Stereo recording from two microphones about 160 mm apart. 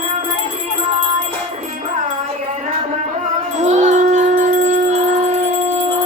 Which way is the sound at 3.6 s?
45° right (ahead or behind).